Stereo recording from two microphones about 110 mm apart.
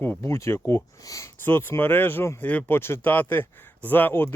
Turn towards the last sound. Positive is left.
turn(degrees=20)  # may be behind; listen again after turning